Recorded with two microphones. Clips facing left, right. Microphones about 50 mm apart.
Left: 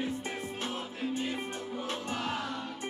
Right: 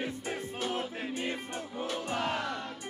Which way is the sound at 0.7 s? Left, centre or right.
Right.